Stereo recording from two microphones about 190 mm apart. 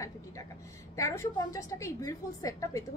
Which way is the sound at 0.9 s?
15° left (ahead or behind).